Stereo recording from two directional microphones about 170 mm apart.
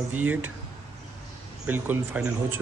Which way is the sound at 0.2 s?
10° right (ahead or behind).